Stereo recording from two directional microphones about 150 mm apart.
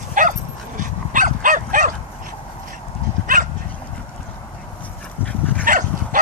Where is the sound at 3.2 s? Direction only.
65° right (ahead or behind).